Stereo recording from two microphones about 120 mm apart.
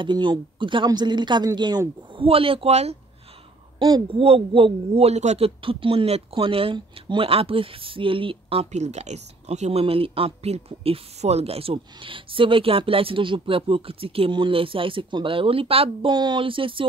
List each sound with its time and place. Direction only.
0.0 s speech: 40° right (ahead or behind)
2.2 s speech: 50° right (ahead or behind)
3.8 s speech: 35° right (ahead or behind)
4.2 s a man's voice: 50° right (ahead or behind); by 5.5 s 70° right (ahead or behind)
5.6 s speech: 50° right (ahead or behind)